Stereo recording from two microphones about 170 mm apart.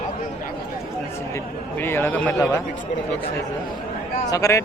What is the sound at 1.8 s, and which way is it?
Speech, 15° left (ahead or behind).